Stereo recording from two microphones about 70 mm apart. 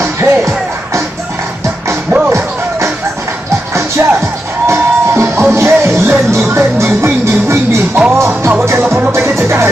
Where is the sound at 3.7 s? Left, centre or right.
Right.